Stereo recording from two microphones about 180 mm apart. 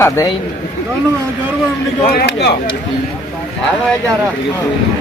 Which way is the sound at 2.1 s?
70° left (ahead or behind).